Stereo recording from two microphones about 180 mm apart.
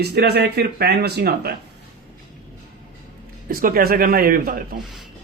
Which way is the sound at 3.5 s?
55° right (ahead or behind).